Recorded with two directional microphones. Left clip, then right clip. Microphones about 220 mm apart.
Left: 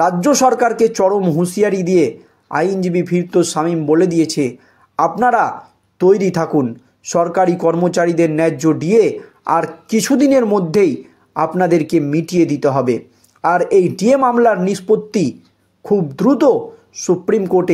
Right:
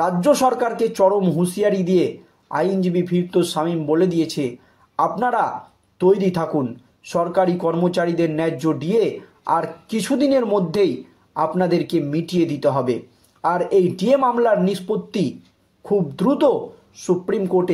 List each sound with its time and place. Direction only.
0.0 s speech: 30° left (ahead or behind)